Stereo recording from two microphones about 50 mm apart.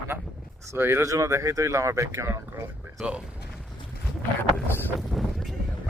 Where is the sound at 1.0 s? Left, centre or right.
Right.